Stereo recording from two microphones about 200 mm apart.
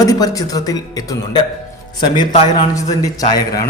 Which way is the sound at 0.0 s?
15° left (ahead or behind).